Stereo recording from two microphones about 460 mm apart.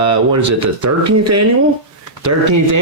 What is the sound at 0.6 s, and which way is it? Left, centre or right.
Speech, right.